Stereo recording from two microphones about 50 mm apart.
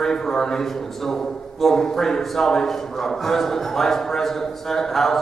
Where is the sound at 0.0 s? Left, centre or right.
Centre.